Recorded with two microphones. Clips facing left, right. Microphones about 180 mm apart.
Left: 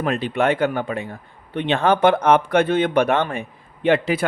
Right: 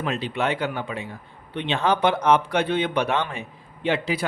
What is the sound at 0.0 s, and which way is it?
Speech, 50° left (ahead or behind).